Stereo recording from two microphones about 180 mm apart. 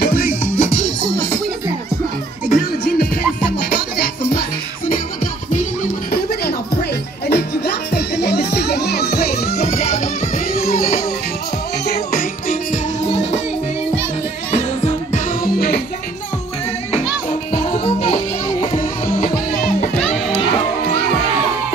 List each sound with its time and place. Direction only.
0.0 s music: 55° left (ahead or behind)
2.5 s music: 60° left (ahead or behind)
6.1 s music: 60° left (ahead or behind)
9.7 s music: 40° left (ahead or behind)
10.6 s music: 55° left (ahead or behind); by 13.4 s 40° left (ahead or behind)
15.0 s music: 45° left (ahead or behind)
17.6 s music: 30° left (ahead or behind)
19.3 s music: 45° left (ahead or behind)